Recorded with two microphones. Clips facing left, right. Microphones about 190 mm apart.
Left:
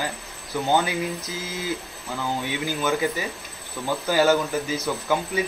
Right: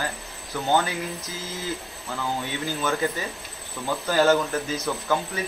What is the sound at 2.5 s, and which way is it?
Speech, 15° left (ahead or behind).